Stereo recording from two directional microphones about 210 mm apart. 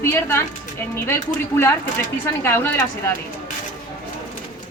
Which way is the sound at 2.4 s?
10° left (ahead or behind).